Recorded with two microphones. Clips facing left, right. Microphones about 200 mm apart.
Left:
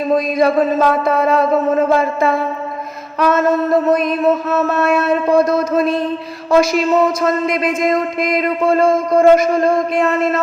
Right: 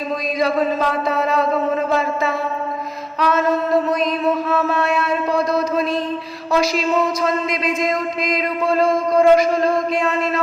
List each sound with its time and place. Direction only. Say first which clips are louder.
0.3 s speech: left 2 dB; 55° left (ahead or behind)